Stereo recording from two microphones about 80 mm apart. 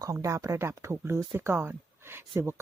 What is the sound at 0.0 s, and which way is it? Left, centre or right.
Speech, right.